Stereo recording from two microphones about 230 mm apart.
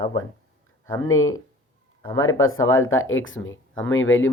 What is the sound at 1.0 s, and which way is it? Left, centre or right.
Speech, left.